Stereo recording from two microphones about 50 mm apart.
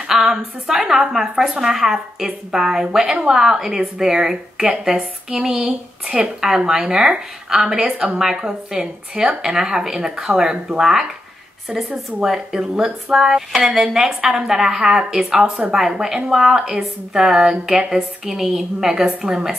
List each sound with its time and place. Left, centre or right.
0.1 s speech: centre